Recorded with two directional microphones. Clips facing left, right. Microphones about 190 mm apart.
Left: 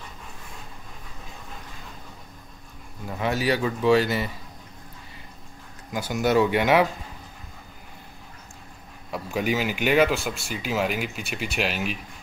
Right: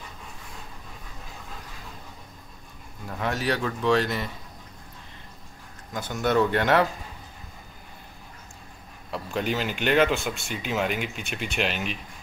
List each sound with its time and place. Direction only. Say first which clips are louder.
3.1 s speech: left 3 dB; 5° left (ahead or behind)
5.9 s speech: left 2 dB; 5° left (ahead or behind)
9.1 s speech: left 2 dB; 10° left (ahead or behind)